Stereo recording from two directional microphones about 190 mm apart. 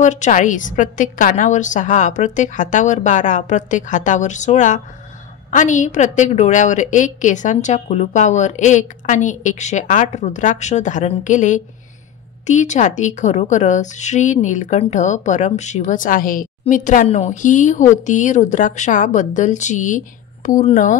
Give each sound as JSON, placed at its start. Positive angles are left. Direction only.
{"t": 0.0, "sound": "a woman's voice", "side_deg": 40}